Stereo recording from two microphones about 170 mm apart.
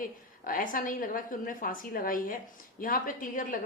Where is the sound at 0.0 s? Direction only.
55° left (ahead or behind).